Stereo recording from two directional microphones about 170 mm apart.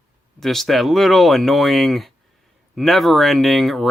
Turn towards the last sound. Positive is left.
turn(degrees=0)  # may be behind; listen again after turning